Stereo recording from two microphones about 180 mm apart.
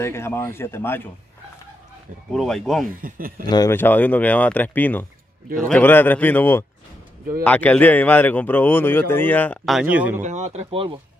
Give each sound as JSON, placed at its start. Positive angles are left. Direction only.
{"t": 0.0, "sound": "speech", "side_deg": 15}
{"t": 2.3, "sound": "speech", "side_deg": 0}
{"t": 3.0, "sound": "speech", "side_deg": -50}
{"t": 3.4, "sound": "speech", "side_deg": 20}
{"t": 10.2, "sound": "speech", "side_deg": -40}